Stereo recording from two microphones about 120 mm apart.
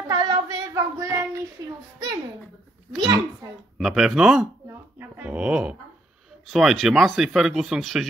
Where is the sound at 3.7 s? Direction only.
5° right (ahead or behind).